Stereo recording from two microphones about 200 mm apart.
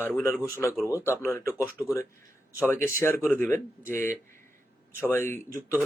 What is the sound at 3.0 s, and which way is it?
Speech, 10° left (ahead or behind).